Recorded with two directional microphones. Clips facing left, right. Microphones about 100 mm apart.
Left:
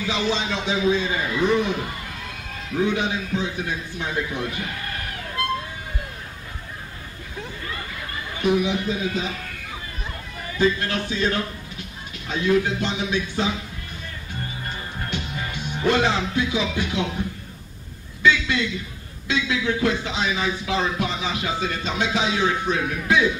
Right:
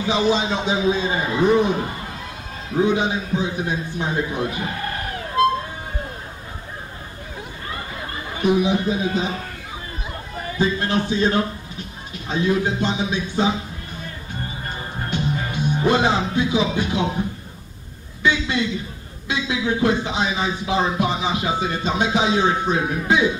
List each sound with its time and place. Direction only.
0.0 s speech: 20° right (ahead or behind)
7.6 s chatter: 30° right (ahead or behind)
10.6 s speech: 20° right (ahead or behind)
15.3 s music: 40° right (ahead or behind)
15.7 s speech: 20° right (ahead or behind)
18.2 s speech: 20° right (ahead or behind)